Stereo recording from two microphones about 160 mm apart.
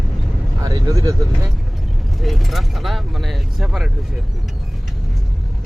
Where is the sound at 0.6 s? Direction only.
20° right (ahead or behind).